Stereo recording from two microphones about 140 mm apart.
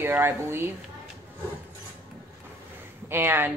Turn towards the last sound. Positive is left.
turn(degrees=-15)  # may be behind; listen again after turning